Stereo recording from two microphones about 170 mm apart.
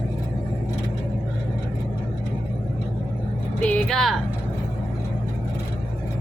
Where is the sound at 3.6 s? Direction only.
10° left (ahead or behind).